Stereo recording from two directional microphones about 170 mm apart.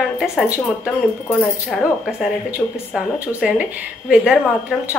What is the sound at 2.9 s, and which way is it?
A woman's voice, 5° right (ahead or behind).